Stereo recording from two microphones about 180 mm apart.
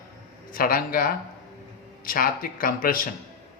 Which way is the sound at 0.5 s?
55° left (ahead or behind).